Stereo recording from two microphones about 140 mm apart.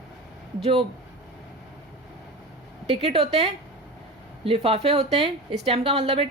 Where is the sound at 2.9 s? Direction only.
50° right (ahead or behind).